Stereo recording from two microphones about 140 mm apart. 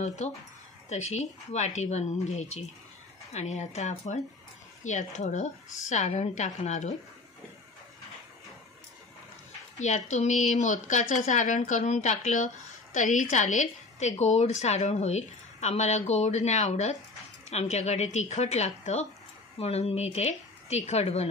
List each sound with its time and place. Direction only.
0.0 s a woman's voice: 55° left (ahead or behind)
9.8 s a woman's voice: 55° left (ahead or behind)